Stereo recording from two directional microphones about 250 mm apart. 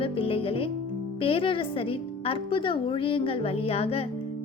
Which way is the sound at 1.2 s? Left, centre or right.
Left.